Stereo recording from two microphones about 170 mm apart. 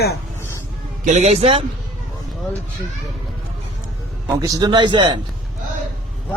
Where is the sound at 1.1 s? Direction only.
45° right (ahead or behind).